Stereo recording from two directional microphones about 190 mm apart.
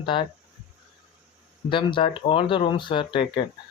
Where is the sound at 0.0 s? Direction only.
25° left (ahead or behind).